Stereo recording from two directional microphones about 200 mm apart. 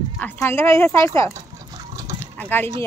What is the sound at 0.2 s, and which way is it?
Speech, 10° left (ahead or behind).